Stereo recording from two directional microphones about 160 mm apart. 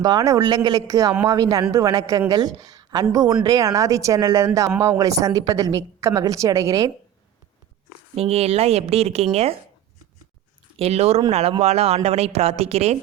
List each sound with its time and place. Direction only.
0.0 s a woman's voice: 25° right (ahead or behind)
8.1 s speech: 40° right (ahead or behind)
10.8 s speech: 40° right (ahead or behind)